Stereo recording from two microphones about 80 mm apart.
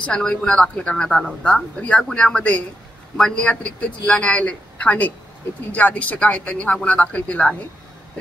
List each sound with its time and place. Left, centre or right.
0.0 s speech: centre